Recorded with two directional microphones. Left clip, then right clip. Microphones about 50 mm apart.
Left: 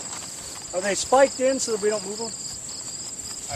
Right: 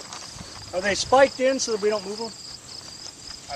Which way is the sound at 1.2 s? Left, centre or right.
Right.